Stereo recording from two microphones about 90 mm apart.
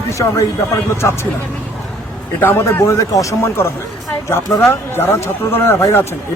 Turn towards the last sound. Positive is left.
turn(degrees=30)  # may be behind; listen again after turning